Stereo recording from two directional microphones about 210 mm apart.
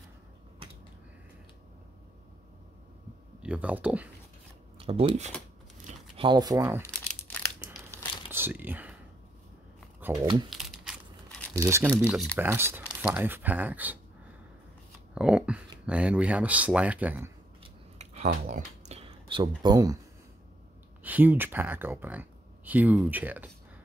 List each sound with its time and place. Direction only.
3.4 s speech: 5° right (ahead or behind)
4.7 s speech: 25° right (ahead or behind)
5.9 s a sound: 25° right (ahead or behind)
6.8 s crumpling: 10° left (ahead or behind)
8.3 s speech: 10° right (ahead or behind)
10.0 s crumpling: 10° right (ahead or behind)
10.5 s crushing: centre (ahead or behind)
11.5 s speech: 15° right (ahead or behind)
11.9 s speech: centre (ahead or behind)
15.1 s speech: 5° right (ahead or behind)
17.9 s a sound: 30° right (ahead or behind)
21.0 s speech: 10° right (ahead or behind)